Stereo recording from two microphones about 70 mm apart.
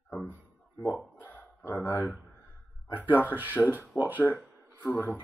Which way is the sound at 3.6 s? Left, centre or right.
Centre.